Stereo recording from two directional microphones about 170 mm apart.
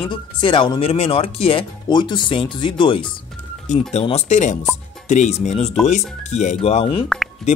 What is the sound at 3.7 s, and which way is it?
Speech, 45° left (ahead or behind).